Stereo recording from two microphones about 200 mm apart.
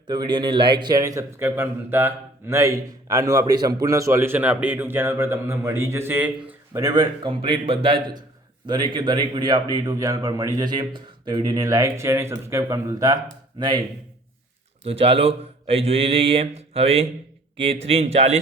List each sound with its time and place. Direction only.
0.1 s a man's voice: 20° right (ahead or behind)
6.8 s speech: 20° right (ahead or behind)
14.8 s speech: 30° right (ahead or behind)